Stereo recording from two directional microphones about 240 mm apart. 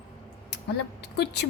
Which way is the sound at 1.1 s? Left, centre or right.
Left.